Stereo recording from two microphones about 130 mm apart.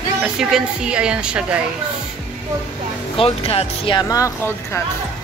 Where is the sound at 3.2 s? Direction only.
45° left (ahead or behind).